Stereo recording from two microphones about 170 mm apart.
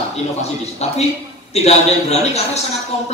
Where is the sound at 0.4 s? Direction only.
40° left (ahead or behind).